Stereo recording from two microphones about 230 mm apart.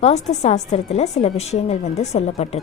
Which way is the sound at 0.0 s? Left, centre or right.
Left.